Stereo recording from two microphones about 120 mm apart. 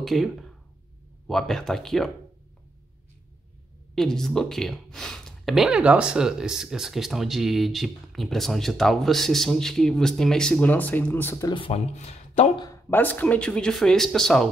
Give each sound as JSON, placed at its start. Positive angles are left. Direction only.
{"t": 0.0, "sound": "speech", "side_deg": 0}
{"t": 3.9, "sound": "speech", "side_deg": 5}
{"t": 11.5, "sound": "speech", "side_deg": 50}
{"t": 11.9, "sound": "speech", "side_deg": 60}
{"t": 12.9, "sound": "speech", "side_deg": 15}